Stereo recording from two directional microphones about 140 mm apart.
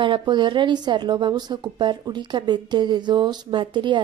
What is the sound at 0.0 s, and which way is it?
A woman's voice, 35° right (ahead or behind).